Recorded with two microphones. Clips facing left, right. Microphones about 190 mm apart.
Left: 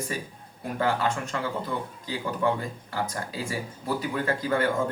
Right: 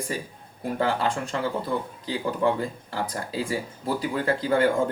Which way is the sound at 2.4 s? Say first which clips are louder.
Right 2 dB; 30° right (ahead or behind).